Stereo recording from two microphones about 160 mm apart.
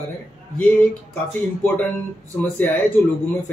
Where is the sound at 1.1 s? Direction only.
10° left (ahead or behind).